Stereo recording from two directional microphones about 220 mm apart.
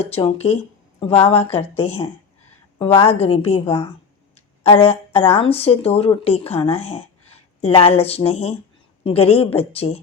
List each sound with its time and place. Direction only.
0.0 s speech: 25° left (ahead or behind)
4.4 s a sound: 25° left (ahead or behind)
5.4 s speech: 25° left (ahead or behind)